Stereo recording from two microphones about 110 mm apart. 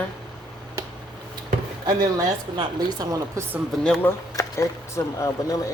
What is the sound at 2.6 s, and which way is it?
Speech, 35° right (ahead or behind).